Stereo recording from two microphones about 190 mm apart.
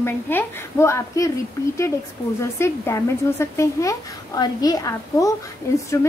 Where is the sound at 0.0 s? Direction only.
10° left (ahead or behind).